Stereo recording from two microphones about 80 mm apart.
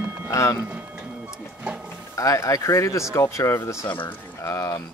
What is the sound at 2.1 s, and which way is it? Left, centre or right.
Speech, left.